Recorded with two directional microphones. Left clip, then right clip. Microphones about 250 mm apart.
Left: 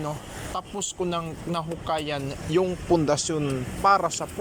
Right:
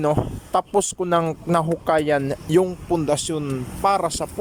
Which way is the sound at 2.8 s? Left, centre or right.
Centre.